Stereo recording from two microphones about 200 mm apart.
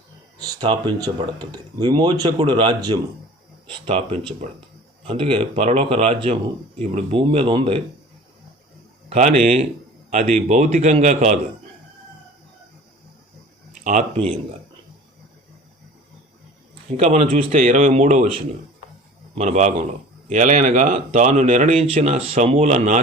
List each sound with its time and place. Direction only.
0.3 s speech: 20° right (ahead or behind)
9.0 s speech: 35° right (ahead or behind)
13.8 s speech: 40° right (ahead or behind)
17.0 s speech: 35° right (ahead or behind)
19.4 s speech: 35° right (ahead or behind)